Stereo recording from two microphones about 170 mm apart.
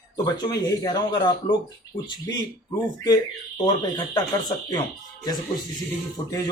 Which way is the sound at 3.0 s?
25° left (ahead or behind).